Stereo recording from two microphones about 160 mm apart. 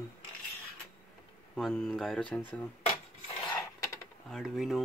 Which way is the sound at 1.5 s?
5° left (ahead or behind).